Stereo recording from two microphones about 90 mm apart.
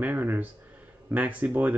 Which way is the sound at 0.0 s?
20° right (ahead or behind).